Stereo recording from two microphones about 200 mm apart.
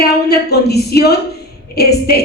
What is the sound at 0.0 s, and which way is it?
A woman's voice, 55° left (ahead or behind).